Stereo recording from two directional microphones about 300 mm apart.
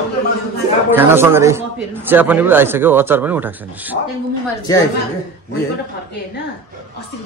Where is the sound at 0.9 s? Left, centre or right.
Centre.